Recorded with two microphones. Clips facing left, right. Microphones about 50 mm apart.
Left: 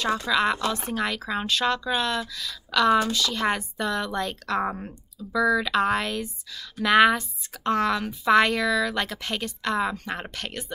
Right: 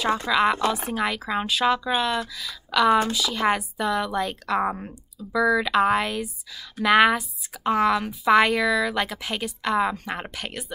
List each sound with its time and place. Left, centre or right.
0.3 s a woman's voice: centre